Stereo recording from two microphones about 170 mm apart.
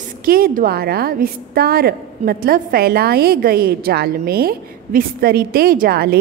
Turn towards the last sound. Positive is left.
turn(degrees=-65)  # may be behind; listen again after turning